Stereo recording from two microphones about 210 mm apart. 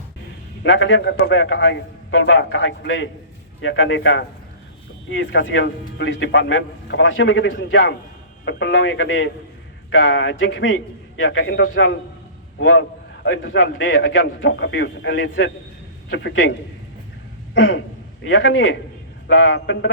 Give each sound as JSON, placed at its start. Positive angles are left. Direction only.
{"t": 0.6, "sound": "a man's voice", "side_deg": 60}
{"t": 17.5, "sound": "a sound", "side_deg": 60}
{"t": 18.3, "sound": "speech", "side_deg": 65}